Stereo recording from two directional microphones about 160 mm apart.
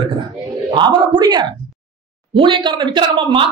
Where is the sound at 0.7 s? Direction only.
30° right (ahead or behind).